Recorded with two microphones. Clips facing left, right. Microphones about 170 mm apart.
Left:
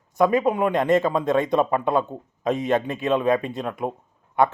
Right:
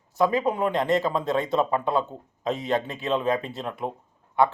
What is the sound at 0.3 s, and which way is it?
A man's voice, 15° left (ahead or behind).